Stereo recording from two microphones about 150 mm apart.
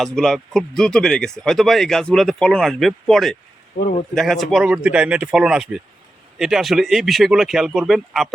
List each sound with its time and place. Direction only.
0.0 s speech: centre (ahead or behind)
3.8 s speech: 90° left
4.1 s speech: centre (ahead or behind)